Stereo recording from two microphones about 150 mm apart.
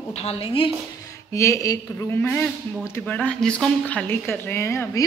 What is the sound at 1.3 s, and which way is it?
A man's voice, 20° left (ahead or behind).